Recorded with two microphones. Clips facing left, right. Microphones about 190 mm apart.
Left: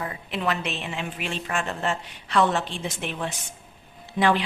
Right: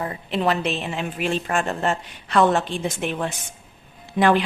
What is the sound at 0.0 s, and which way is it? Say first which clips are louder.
A woman's voice: right 5 dB; 35° right (ahead or behind).